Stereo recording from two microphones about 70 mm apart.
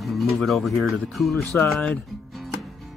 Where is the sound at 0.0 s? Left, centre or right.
Centre.